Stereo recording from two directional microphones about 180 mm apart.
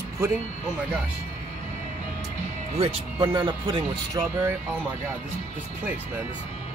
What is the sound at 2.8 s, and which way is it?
Speech, 25° right (ahead or behind).